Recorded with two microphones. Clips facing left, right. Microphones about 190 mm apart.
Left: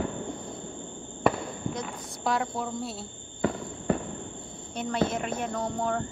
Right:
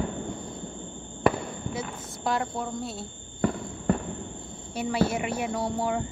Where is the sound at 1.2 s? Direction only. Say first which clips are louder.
Right 1 dB; 5° right (ahead or behind).